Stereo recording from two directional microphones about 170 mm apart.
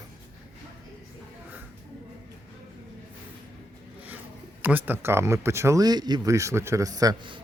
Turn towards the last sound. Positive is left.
turn(degrees=-20)  # may be behind; listen again after turning